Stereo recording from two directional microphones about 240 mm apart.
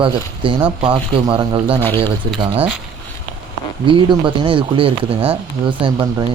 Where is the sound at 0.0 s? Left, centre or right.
Right.